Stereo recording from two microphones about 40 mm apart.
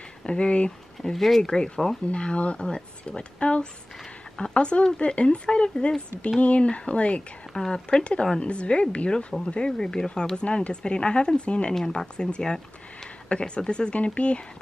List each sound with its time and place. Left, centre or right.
0.2 s speech: left
1.1 s speech: centre
1.5 s speech: centre
2.1 s speech: left
7.5 s speech: centre
8.0 s speech: left
11.7 s speech: centre; by 14.4 s left